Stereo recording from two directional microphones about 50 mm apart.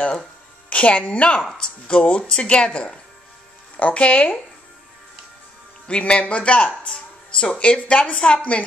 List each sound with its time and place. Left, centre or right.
0.7 s speech: left
5.9 s speech: left
6.8 s music: centre
7.5 s speech: left